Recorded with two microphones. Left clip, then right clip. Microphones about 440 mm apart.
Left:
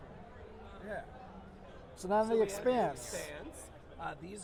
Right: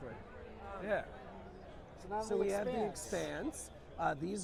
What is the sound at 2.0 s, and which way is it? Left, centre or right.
Speech, left.